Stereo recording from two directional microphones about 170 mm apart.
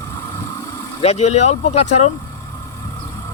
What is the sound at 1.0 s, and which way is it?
Speech, 40° left (ahead or behind).